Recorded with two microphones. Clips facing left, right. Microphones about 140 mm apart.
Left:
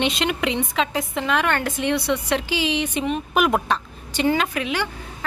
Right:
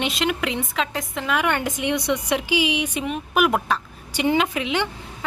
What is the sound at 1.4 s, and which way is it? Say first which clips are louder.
A woman's voice: left 1 dB; 15° right (ahead or behind).